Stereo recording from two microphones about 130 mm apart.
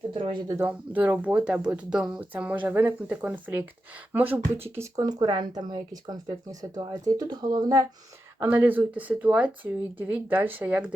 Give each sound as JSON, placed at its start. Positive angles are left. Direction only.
{"t": 0.1, "sound": "speech", "side_deg": -40}
{"t": 0.4, "sound": "speech", "side_deg": -20}
{"t": 8.4, "sound": "speech", "side_deg": -15}